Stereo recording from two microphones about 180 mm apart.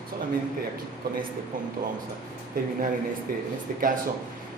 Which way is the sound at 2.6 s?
50° right (ahead or behind).